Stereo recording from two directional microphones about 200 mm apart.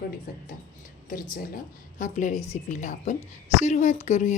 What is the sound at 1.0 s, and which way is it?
A woman's voice, 40° left (ahead or behind).